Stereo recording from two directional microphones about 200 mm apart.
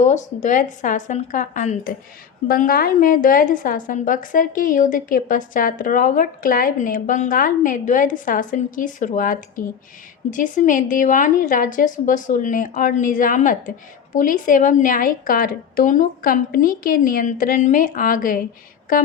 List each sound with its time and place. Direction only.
0.0 s a woman's voice: 35° left (ahead or behind)